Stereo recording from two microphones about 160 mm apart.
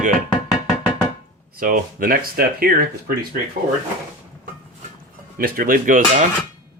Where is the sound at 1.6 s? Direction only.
60° right (ahead or behind).